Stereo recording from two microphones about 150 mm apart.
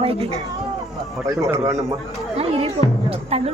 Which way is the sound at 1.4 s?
20° right (ahead or behind).